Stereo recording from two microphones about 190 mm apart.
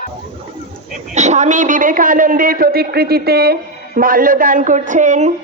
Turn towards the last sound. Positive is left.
turn(degrees=-40)  # may be behind; listen again after turning